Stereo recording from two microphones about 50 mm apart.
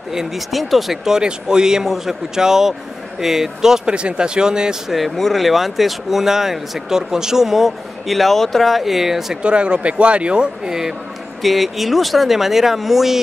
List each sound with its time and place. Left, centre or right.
0.1 s speech: centre
4.9 s speech: centre
9.4 s speech: right; by 13.2 s centre